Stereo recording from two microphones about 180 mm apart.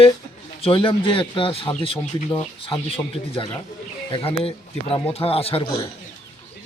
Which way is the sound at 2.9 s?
30° left (ahead or behind).